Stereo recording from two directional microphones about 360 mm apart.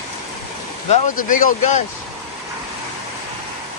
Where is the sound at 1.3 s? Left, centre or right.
Left.